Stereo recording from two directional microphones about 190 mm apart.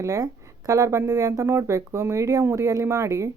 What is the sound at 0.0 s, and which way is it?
Speech, 15° right (ahead or behind).